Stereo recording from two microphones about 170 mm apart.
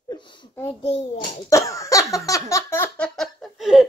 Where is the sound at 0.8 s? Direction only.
35° left (ahead or behind).